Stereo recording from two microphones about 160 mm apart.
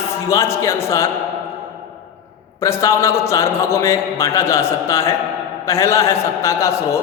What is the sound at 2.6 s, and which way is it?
A man's voice, 15° left (ahead or behind).